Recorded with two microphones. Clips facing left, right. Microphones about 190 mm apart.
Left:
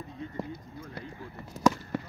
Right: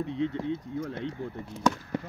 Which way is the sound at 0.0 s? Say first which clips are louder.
Right 11 dB; 80° right.